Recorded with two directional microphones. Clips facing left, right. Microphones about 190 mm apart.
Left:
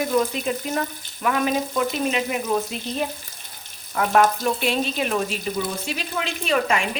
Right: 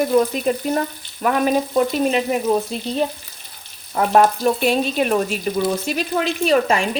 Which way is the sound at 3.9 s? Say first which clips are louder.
Right 3 dB; 40° right (ahead or behind).